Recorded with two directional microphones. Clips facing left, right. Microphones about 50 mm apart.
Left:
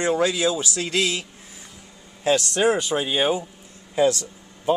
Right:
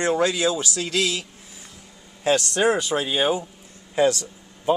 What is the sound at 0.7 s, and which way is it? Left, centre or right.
Speech, left.